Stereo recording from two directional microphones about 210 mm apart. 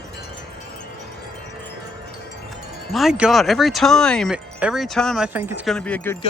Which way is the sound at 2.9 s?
Centre (ahead or behind).